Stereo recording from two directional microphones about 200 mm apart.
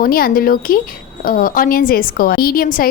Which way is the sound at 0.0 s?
50° left (ahead or behind).